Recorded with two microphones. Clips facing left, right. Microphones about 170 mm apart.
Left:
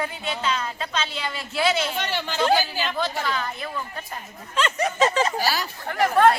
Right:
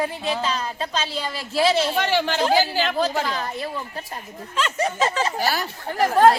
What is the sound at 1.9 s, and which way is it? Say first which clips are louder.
Speech: right 7 dB; 75° right (ahead or behind).